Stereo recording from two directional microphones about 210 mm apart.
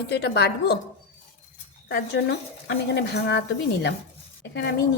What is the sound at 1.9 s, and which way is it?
Speech, 50° left (ahead or behind).